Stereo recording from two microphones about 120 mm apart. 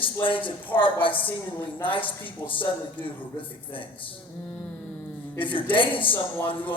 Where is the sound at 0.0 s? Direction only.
45° left (ahead or behind).